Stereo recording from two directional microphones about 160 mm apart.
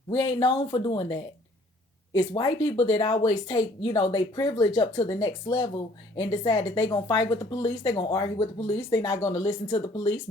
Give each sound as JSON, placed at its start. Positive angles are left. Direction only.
{"t": 0.1, "sound": "speech", "side_deg": 25}